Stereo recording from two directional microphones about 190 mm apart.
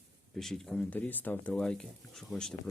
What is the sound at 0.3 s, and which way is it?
Speech, centre (ahead or behind).